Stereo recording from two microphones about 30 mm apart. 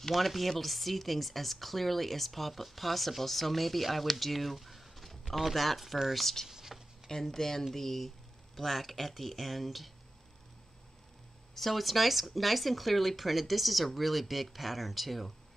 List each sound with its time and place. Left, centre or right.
0.1 s speech: centre
6.5 s a sound: centre
7.1 s speech: centre
11.7 s speech: centre